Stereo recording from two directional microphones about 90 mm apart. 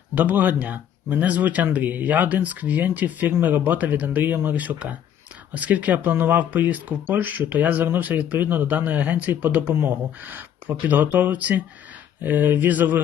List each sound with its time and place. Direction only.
0.1 s speech: 20° right (ahead or behind)